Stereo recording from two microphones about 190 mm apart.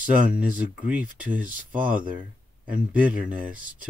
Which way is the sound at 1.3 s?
45° right (ahead or behind).